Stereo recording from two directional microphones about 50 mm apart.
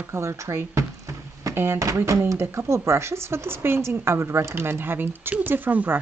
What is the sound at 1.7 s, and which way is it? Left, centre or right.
Speech, right.